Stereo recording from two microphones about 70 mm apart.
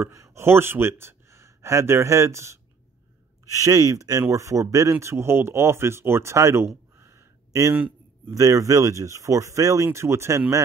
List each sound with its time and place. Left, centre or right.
0.0 s speech: right
5.0 s speech: right
7.0 s a sound: right
8.3 s speech: right